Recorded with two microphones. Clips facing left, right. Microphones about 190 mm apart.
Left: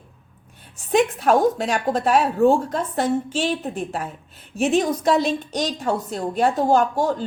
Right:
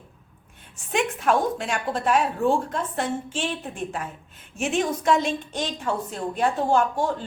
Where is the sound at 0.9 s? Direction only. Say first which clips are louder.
Left 5 dB; 40° left (ahead or behind).